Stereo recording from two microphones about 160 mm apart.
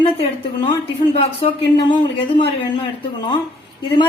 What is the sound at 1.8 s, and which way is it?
Speech, 30° left (ahead or behind).